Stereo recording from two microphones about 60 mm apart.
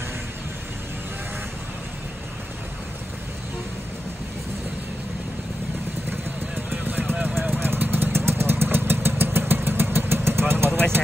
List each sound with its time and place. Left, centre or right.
6.5 s vehicle: right
7.2 s vehicle: centre
7.6 s vehicle: right